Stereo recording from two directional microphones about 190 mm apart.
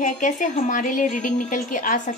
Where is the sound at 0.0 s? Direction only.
40° left (ahead or behind).